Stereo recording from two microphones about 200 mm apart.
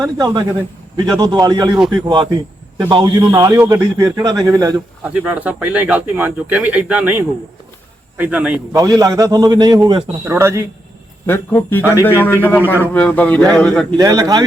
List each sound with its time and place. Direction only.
0.0 s a man's voice: 20° right (ahead or behind)
8.7 s speech: 15° right (ahead or behind)
11.3 s a man's voice: 10° left (ahead or behind)
13.9 s a man's voice: 20° right (ahead or behind)